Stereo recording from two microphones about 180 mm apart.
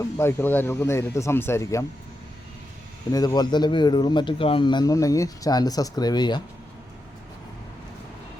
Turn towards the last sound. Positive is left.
turn(degrees=25)  # may be behind; listen again after turning